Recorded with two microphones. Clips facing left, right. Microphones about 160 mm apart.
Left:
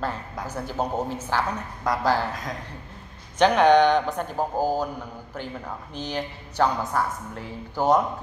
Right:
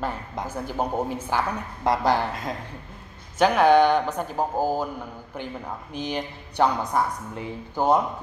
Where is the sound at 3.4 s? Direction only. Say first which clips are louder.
Even; 5° right (ahead or behind).